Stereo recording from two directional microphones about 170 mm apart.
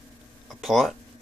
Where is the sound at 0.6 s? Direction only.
Centre (ahead or behind).